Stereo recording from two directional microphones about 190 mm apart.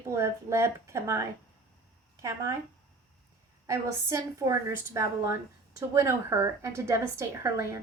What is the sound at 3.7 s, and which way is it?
A woman's voice, 15° right (ahead or behind).